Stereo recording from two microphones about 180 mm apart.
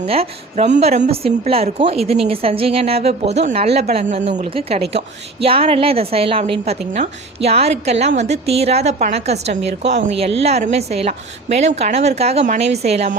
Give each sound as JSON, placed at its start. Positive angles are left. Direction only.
{"t": 0.0, "sound": "a woman's voice", "side_deg": -35}